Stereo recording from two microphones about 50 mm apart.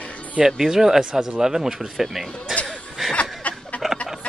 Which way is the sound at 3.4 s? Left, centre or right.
Left.